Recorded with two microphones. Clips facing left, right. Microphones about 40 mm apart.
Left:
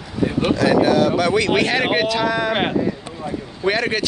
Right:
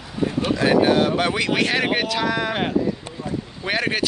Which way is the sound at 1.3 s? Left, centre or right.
Centre.